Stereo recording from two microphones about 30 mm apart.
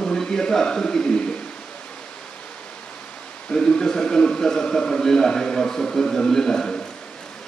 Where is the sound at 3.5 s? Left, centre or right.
Left.